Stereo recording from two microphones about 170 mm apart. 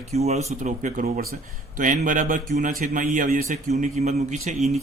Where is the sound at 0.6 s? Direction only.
50° right (ahead or behind).